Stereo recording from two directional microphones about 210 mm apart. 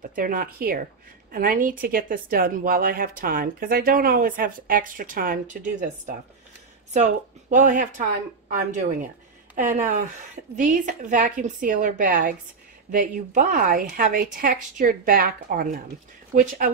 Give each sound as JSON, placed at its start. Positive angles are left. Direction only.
{"t": 0.1, "sound": "a woman's voice", "side_deg": -40}
{"t": 9.6, "sound": "a woman's voice", "side_deg": -40}